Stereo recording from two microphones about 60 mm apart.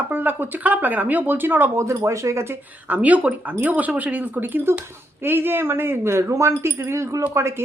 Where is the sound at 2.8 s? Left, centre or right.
Right.